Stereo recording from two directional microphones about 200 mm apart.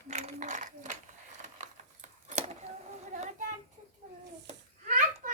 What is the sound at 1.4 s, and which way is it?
Keys jangling, 35° right (ahead or behind).